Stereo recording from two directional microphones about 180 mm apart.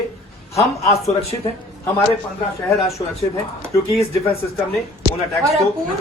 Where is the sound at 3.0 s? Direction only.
25° left (ahead or behind).